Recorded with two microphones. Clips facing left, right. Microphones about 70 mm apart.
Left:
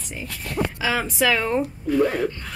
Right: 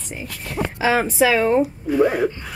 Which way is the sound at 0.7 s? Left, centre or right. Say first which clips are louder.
Right 8 dB; right.